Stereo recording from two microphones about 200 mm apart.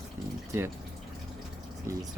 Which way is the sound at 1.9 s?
15° right (ahead or behind).